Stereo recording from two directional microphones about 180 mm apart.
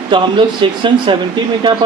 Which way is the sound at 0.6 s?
25° right (ahead or behind).